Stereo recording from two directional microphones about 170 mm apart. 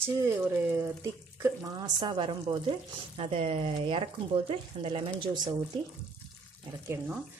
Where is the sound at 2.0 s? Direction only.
25° right (ahead or behind).